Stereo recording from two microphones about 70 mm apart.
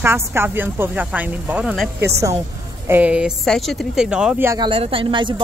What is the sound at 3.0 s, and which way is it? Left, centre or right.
Speech, centre.